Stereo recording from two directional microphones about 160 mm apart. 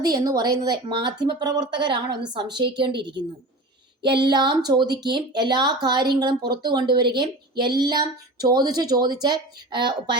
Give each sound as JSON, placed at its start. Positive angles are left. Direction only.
{"t": 0.0, "sound": "a woman's voice", "side_deg": -25}